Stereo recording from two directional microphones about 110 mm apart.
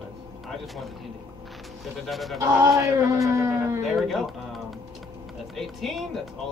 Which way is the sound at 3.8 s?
Centre (ahead or behind).